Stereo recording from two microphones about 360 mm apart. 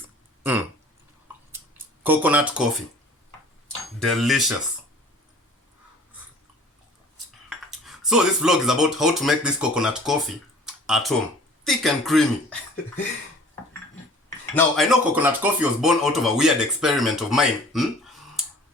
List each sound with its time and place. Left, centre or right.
2.0 s speech: centre
4.0 s speech: centre
7.7 s speech: centre
14.3 s speech: centre